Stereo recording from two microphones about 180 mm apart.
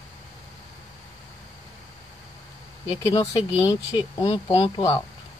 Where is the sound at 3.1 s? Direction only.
20° left (ahead or behind).